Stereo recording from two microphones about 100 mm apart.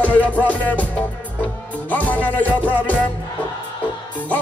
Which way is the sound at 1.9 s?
15° left (ahead or behind).